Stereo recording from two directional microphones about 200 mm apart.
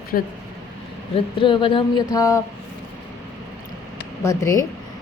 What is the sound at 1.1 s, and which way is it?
Speech, 25° left (ahead or behind).